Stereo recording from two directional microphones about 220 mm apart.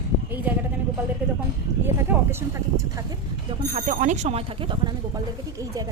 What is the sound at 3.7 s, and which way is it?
Speech, 35° right (ahead or behind).